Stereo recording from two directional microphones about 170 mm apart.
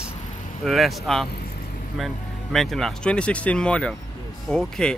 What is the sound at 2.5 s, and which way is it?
Speech, centre (ahead or behind).